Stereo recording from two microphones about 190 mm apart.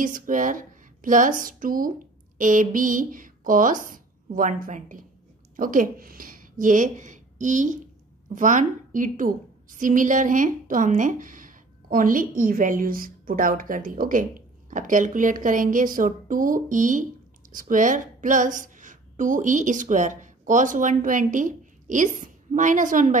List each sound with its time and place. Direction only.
0.0 s a woman's voice: 45° right (ahead or behind)